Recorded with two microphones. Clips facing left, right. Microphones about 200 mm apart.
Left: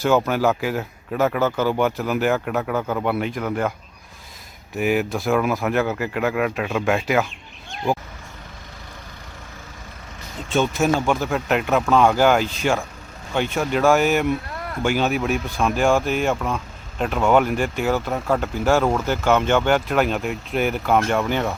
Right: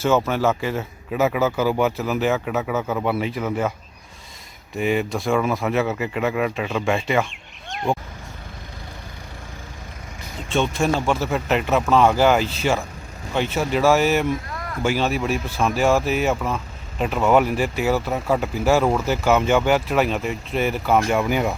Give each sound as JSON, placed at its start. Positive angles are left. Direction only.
{"t": 0.0, "sound": "speech", "side_deg": 0}
{"t": 4.7, "sound": "speech", "side_deg": 5}
{"t": 7.9, "sound": "vehicle", "side_deg": 0}
{"t": 10.5, "sound": "speech", "side_deg": 0}